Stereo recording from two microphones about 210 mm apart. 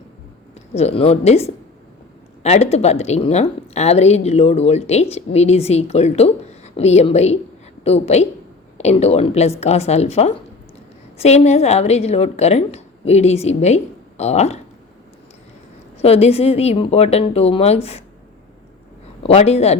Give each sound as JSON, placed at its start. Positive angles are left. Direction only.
{"t": 0.7, "sound": "a woman's voice", "side_deg": 30}
{"t": 16.0, "sound": "a woman's voice", "side_deg": 30}
{"t": 19.2, "sound": "a woman's voice", "side_deg": 30}